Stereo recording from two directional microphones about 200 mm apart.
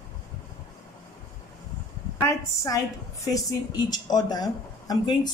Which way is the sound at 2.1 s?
15° left (ahead or behind).